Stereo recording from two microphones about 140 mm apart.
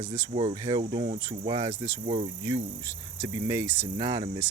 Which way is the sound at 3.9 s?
35° right (ahead or behind).